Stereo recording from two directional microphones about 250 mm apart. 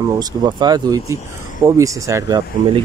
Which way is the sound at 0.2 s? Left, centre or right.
Centre.